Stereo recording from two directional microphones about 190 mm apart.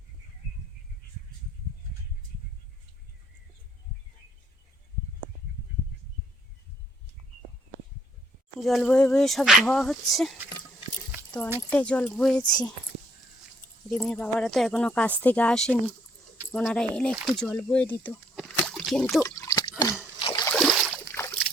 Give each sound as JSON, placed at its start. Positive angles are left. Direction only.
{"t": 8.6, "sound": "speech", "side_deg": 0}
{"t": 11.7, "sound": "speech", "side_deg": 5}
{"t": 13.9, "sound": "speech", "side_deg": 5}
{"t": 18.3, "sound": "slosh", "side_deg": 5}
{"t": 20.2, "sound": "boat", "side_deg": 25}
{"t": 20.5, "sound": "a sound", "side_deg": 0}
{"t": 21.1, "sound": "trickle", "side_deg": 10}